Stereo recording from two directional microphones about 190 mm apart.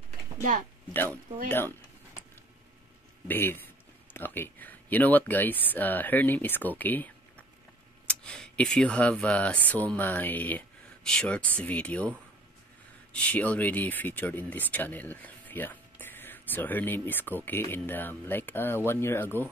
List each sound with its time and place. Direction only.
0.4 s speech: 45° right (ahead or behind)
3.3 s speech: 10° left (ahead or behind)
13.1 s speech: 10° left (ahead or behind)